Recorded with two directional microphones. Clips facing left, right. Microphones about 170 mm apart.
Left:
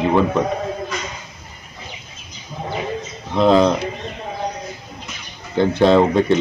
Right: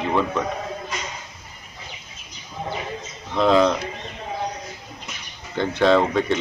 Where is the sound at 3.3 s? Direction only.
30° left (ahead or behind).